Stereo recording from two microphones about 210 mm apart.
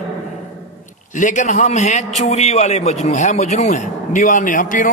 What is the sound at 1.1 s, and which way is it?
A man's voice, 35° left (ahead or behind).